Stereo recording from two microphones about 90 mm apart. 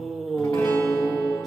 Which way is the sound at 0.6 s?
25° left (ahead or behind).